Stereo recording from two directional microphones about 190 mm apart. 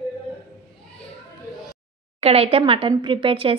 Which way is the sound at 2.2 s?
30° right (ahead or behind).